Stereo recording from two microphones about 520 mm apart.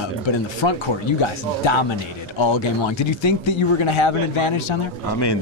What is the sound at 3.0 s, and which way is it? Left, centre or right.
Speech, left.